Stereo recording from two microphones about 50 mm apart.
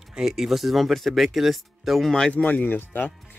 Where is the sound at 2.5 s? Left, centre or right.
Left.